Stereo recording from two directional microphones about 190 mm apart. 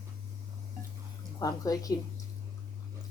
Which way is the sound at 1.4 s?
20° left (ahead or behind).